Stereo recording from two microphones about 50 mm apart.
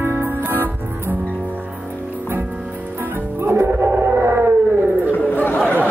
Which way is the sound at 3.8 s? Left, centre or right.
Right.